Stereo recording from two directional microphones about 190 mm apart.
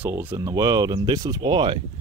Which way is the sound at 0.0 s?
10° right (ahead or behind).